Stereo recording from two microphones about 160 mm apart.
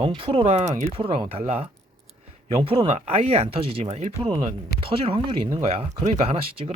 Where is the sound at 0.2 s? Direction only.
35° right (ahead or behind).